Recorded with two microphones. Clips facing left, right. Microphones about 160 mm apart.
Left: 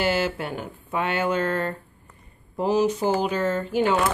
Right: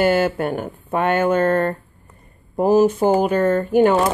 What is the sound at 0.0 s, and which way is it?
A woman's voice, 50° right (ahead or behind).